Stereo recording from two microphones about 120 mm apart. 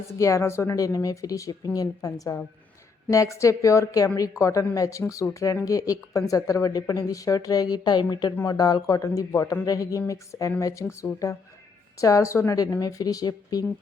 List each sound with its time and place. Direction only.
0.2 s speech: 25° left (ahead or behind)